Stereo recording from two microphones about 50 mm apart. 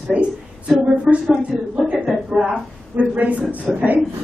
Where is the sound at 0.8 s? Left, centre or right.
Right.